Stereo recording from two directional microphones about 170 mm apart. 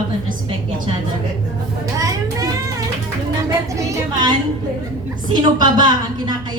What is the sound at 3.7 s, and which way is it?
A woman's voice, 25° right (ahead or behind).